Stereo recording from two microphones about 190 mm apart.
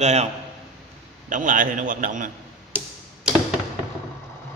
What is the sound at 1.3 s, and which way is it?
Speech, 45° right (ahead or behind).